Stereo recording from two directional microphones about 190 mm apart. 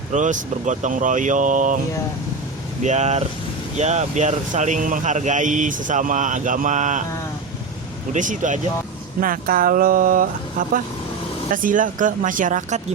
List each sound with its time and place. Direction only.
0.1 s a man's voice: 40° right (ahead or behind)
2.8 s a man's voice: 35° right (ahead or behind)
8.1 s a man's voice: 40° right (ahead or behind)